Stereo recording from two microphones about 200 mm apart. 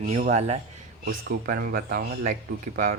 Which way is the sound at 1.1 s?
45° right (ahead or behind).